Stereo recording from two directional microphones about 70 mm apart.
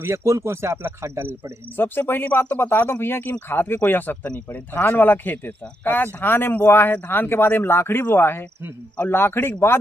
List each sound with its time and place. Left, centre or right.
0.0 s a man's voice: right
1.8 s speech: left